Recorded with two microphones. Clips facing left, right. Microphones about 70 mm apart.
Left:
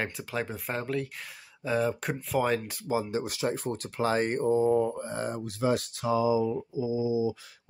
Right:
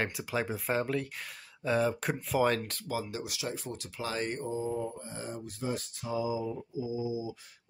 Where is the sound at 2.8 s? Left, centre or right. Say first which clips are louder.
Left 8 dB; left.